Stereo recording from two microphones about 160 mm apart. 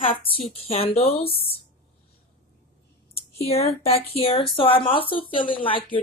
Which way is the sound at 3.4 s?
40° left (ahead or behind).